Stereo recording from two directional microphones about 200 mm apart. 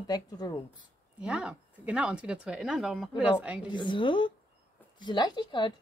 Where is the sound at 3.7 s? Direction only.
25° left (ahead or behind).